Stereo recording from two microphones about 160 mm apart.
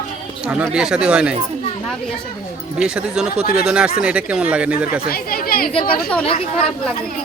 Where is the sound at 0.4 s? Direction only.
5° right (ahead or behind).